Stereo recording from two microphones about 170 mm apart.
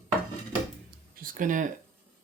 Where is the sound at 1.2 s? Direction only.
55° right (ahead or behind).